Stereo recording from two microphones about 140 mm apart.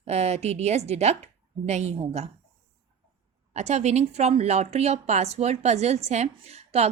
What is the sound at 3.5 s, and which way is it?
A woman's voice, 50° right (ahead or behind).